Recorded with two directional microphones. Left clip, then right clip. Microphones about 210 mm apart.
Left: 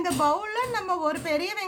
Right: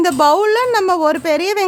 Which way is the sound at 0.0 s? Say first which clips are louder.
Right 12 dB; 55° right (ahead or behind).